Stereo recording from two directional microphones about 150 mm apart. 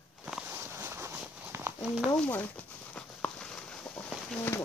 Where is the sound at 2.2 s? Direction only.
10° left (ahead or behind).